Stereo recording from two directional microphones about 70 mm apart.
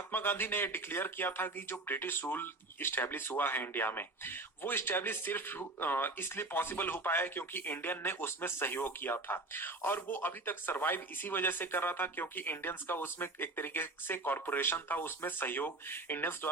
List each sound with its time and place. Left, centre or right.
0.1 s speech: left